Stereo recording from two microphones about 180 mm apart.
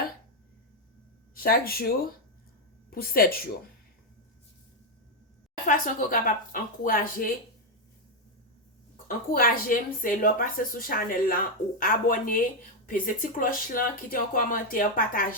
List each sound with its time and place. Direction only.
1.4 s speech: 55° left (ahead or behind)
2.9 s speech: 55° left (ahead or behind)
5.6 s speech: 45° left (ahead or behind)
9.0 s speech: 50° left (ahead or behind)